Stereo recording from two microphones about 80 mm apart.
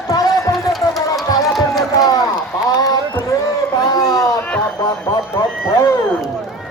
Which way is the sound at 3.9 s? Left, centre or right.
Left.